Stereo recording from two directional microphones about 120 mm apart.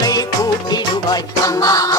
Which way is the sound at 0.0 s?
30° left (ahead or behind).